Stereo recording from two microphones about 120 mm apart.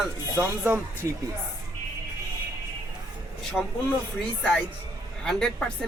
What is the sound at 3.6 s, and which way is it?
Speech, centre (ahead or behind).